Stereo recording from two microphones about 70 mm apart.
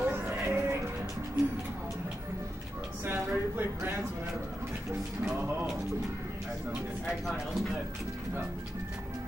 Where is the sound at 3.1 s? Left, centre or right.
Right.